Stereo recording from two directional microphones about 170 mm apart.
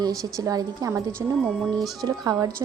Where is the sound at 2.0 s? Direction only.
20° right (ahead or behind).